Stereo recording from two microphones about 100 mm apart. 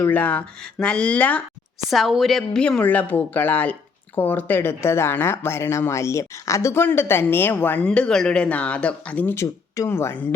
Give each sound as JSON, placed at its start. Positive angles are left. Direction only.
{"t": 0.0, "sound": "speech", "side_deg": 15}
{"t": 1.9, "sound": "a woman's voice", "side_deg": 0}